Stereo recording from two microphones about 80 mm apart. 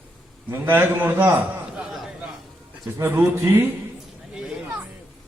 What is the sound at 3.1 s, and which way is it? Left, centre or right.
Speech, right.